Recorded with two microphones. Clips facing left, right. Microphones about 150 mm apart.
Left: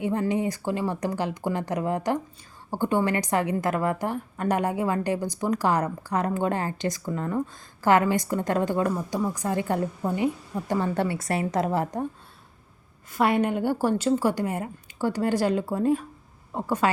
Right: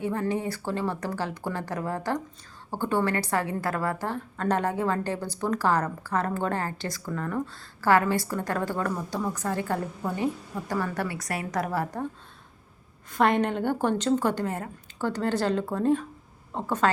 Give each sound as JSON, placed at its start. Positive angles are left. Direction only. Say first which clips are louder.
{"t": 0.0, "sound": "a woman's voice", "louder": "left 3 dB", "side_deg": 15}
{"t": 13.1, "sound": "a woman's voice", "louder": "left 1 dB", "side_deg": 5}